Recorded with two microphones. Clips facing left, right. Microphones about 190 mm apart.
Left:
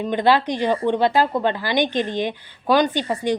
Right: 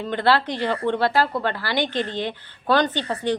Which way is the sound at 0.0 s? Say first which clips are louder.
Left 3 dB; 15° left (ahead or behind).